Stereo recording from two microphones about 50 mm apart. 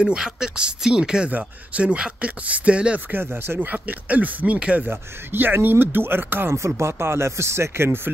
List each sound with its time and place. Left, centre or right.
0.0 s speech: centre
1.3 s speech: right
3.1 s speech: right
4.6 s speech: right
4.8 s speech: right
6.5 s speech: right